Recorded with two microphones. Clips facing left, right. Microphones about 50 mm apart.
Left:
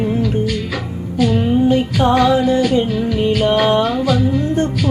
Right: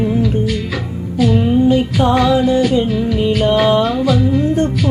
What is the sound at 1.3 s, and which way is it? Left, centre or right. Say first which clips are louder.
Female singing: right 2 dB; centre.